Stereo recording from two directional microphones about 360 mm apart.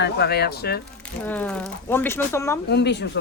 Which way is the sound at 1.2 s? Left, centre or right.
Centre.